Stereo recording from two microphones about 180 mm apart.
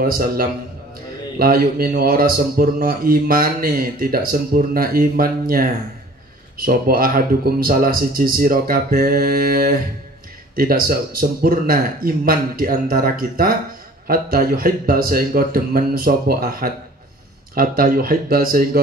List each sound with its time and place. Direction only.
0.0 s a man's voice: 55° right (ahead or behind)